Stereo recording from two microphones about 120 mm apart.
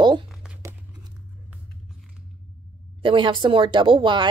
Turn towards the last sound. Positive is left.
turn(degrees=-40)  # may be behind; listen again after turning